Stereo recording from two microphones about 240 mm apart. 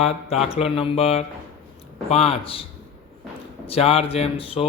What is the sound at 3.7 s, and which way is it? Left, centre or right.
Mantra, left.